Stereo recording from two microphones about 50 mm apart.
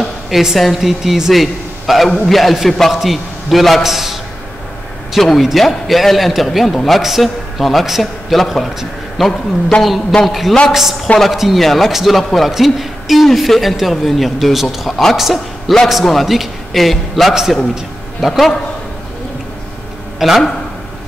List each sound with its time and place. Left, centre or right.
0.3 s a man's voice: centre
9.7 s a woman's voice: left
10.2 s a man's voice: centre
17.3 s a man's voice: centre
20.2 s speech: centre